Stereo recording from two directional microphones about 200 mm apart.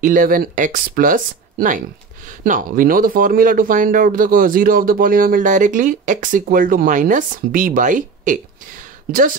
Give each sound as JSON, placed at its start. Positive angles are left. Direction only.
{"t": 0.0, "sound": "speech", "side_deg": -45}